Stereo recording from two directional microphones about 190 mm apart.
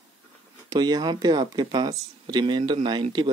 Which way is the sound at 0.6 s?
20° right (ahead or behind).